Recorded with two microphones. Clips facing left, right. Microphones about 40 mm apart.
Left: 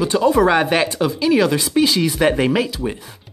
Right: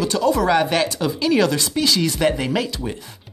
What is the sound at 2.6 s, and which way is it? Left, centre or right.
Speech, centre.